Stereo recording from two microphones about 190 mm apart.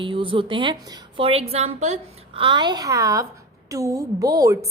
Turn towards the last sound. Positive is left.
turn(degrees=-15)  # may be behind; listen again after turning